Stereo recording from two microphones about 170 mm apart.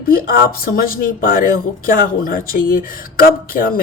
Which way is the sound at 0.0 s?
60° left (ahead or behind).